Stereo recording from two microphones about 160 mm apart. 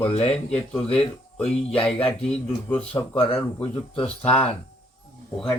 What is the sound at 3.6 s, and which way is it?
Speech, 35° left (ahead or behind).